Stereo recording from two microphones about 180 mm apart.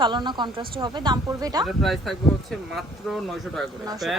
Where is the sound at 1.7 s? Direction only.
Centre (ahead or behind).